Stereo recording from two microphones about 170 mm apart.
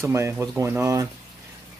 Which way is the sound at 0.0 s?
15° right (ahead or behind).